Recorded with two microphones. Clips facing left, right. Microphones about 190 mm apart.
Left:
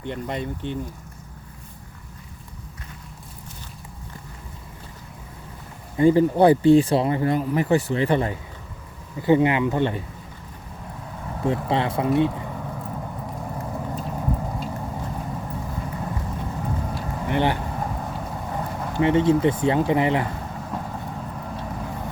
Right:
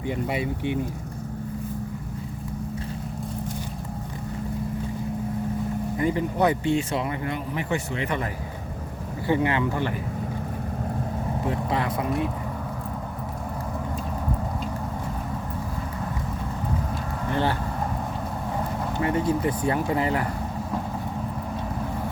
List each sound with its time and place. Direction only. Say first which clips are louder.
0.0 s speech: right 2 dB; 5° right (ahead or behind)
6.0 s speech: left 8 dB; 30° left (ahead or behind)
9.2 s speech: left 5 dB; 20° left (ahead or behind)
11.4 s speech: left 5 dB; 30° left (ahead or behind)
16.9 s vehicle: left 2 dB; 20° left (ahead or behind)
18.5 s vehicle: even; centre (ahead or behind)
19.0 s speech: left 6 dB; 25° left (ahead or behind)